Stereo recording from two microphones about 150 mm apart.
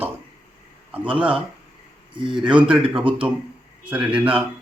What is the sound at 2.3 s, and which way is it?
Speech, 5° right (ahead or behind).